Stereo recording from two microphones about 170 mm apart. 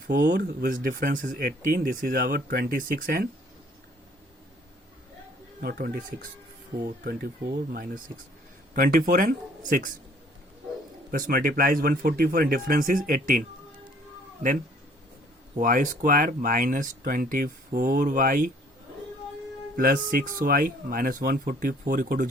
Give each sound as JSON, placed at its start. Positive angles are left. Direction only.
{"t": 0.1, "sound": "speech", "side_deg": -75}
{"t": 5.5, "sound": "speech", "side_deg": -60}
{"t": 6.8, "sound": "speech", "side_deg": -65}
{"t": 11.1, "sound": "speech", "side_deg": -60}
{"t": 15.5, "sound": "speech", "side_deg": -50}
{"t": 19.7, "sound": "speech", "side_deg": -55}